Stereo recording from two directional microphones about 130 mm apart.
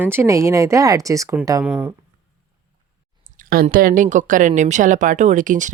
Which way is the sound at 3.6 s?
90° right.